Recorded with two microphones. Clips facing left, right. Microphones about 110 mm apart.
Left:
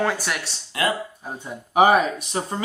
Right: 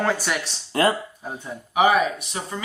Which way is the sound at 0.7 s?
40° right (ahead or behind).